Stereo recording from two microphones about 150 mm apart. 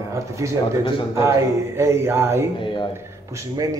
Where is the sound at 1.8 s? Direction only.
15° right (ahead or behind).